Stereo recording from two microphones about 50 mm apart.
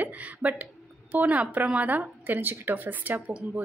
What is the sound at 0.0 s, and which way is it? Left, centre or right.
A woman's voice, right.